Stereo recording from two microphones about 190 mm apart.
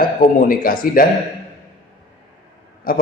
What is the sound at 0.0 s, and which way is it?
Speech, 50° left (ahead or behind).